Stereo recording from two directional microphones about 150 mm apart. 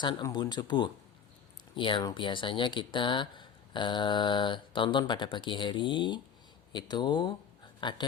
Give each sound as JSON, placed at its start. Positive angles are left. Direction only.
{"t": 0.0, "sound": "speech", "side_deg": 30}